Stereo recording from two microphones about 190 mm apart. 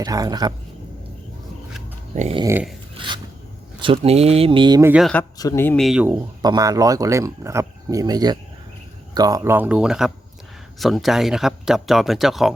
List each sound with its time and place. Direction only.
0.0 s speech: 20° right (ahead or behind)
2.1 s a sound: 35° right (ahead or behind)
2.4 s speech: 15° right (ahead or behind)
3.8 s speech: 30° right (ahead or behind)
4.8 s speech: 10° right (ahead or behind)
5.4 s speech: 15° left (ahead or behind); by 6.1 s 5° right (ahead or behind)
6.4 s speech: 20° right (ahead or behind); by 12.5 s centre (ahead or behind)